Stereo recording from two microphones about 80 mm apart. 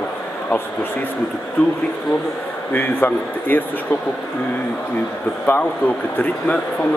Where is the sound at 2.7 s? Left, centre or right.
Left.